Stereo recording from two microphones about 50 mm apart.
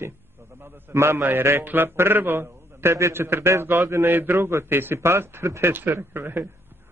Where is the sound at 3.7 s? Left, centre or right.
Right.